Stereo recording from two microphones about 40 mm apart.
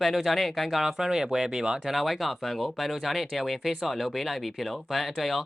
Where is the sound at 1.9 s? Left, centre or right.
Centre.